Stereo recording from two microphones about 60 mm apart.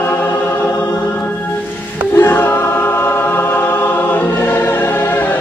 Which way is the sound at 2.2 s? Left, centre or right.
Left.